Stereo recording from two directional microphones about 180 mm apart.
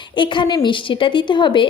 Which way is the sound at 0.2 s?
25° left (ahead or behind).